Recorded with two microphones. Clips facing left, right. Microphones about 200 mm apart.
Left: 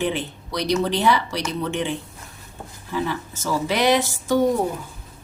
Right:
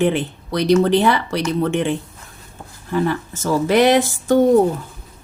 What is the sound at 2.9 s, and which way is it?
A woman's voice, 55° right (ahead or behind).